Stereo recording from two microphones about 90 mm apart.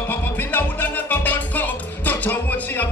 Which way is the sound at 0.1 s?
20° left (ahead or behind).